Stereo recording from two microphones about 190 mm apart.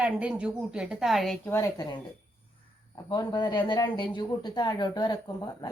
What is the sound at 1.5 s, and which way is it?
A woman's voice, 15° left (ahead or behind).